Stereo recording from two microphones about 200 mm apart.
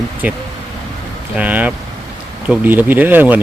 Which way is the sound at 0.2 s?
10° right (ahead or behind).